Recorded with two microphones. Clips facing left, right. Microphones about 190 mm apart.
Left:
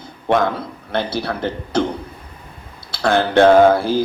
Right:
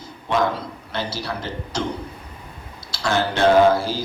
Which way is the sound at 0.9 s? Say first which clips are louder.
Left 7 dB; 55° left (ahead or behind).